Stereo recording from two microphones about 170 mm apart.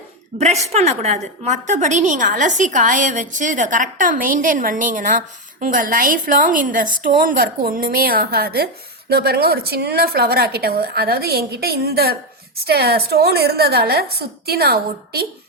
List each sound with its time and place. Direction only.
0.3 s a woman's voice: 40° right (ahead or behind); by 15.3 s 65° right (ahead or behind)